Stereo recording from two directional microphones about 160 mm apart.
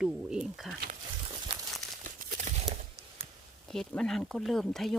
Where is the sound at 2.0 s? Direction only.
55° right (ahead or behind).